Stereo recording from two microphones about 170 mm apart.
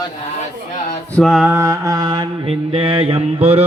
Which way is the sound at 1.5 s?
20° right (ahead or behind).